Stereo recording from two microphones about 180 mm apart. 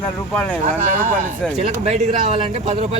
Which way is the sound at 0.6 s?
45° right (ahead or behind).